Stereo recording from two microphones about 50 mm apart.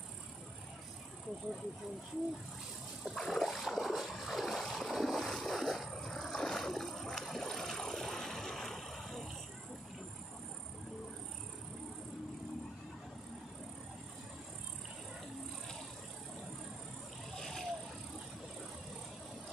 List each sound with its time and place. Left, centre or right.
3.2 s a sound: centre
4.1 s boat: centre
5.9 s vehicle: centre
17.4 s vehicle: centre